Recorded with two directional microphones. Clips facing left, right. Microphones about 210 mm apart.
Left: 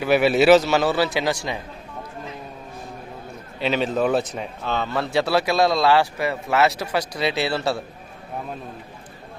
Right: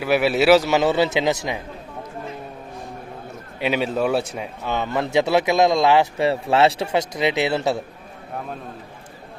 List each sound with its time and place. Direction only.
0.0 s a man's voice: 5° right (ahead or behind); by 1.5 s 20° right (ahead or behind)
3.6 s a man's voice: 10° right (ahead or behind)